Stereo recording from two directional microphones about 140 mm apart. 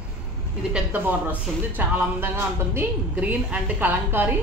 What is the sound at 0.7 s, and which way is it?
Speech, 15° right (ahead or behind).